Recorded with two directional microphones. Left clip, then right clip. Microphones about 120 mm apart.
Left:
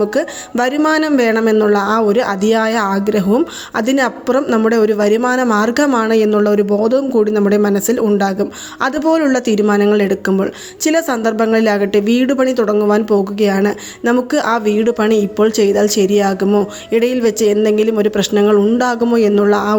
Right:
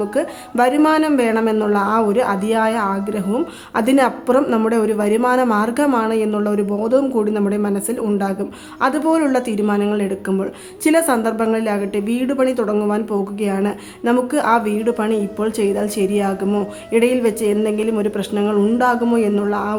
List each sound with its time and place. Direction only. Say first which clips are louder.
0.0 s a woman's voice: left 4 dB; 25° left (ahead or behind)
3.2 s a woman's voice: left 6 dB; 25° left (ahead or behind)
8.9 s a woman's voice: left 4 dB; 20° left (ahead or behind); by 10.5 s 35° left (ahead or behind)
10.8 s a woman's voice: left 1 dB; 20° left (ahead or behind)